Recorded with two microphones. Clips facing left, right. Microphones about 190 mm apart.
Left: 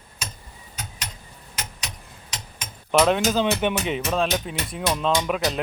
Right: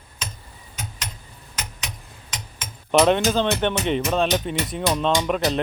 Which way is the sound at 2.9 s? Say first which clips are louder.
Right 2 dB; centre (ahead or behind).